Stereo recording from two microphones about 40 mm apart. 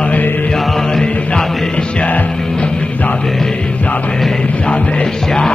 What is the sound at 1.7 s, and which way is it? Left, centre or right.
Music, left.